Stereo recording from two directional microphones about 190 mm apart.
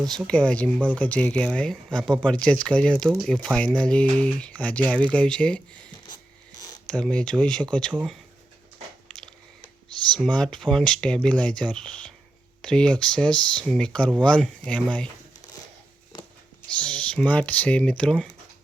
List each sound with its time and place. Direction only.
0.0 s speech: centre (ahead or behind)
6.8 s speech: 5° left (ahead or behind)
9.0 s a sound: 5° left (ahead or behind)
10.2 s speech: 5° left (ahead or behind)
16.1 s a sound: 20° left (ahead or behind)
16.6 s speech: 5° left (ahead or behind)